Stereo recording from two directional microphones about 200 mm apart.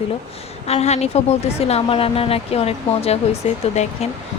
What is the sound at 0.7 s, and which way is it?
Speech, 30° left (ahead or behind).